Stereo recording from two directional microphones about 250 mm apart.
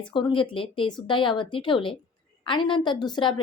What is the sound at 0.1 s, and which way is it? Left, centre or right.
A woman's voice, centre.